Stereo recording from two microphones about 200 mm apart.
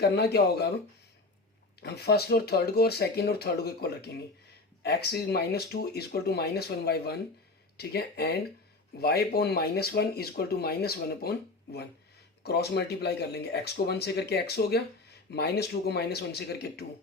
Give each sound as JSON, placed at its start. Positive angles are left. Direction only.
{"t": 0.2, "sound": "speech", "side_deg": 55}
{"t": 1.8, "sound": "speech", "side_deg": 55}